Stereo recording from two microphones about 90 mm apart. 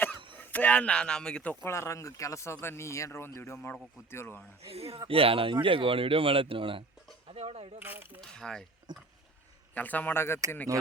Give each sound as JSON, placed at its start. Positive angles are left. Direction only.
{"t": 0.3, "sound": "speech", "side_deg": 15}
{"t": 1.6, "sound": "speech", "side_deg": 30}
{"t": 4.6, "sound": "speech", "side_deg": -90}
{"t": 7.3, "sound": "speech", "side_deg": -90}
{"t": 7.8, "sound": "speech", "side_deg": -20}
{"t": 8.2, "sound": "mechanisms", "side_deg": 5}
{"t": 9.7, "sound": "speech", "side_deg": 20}